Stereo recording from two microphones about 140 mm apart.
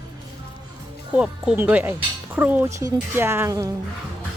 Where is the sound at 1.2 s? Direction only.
10° right (ahead or behind).